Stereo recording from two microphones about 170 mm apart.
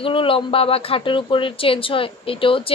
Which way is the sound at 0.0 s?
30° left (ahead or behind).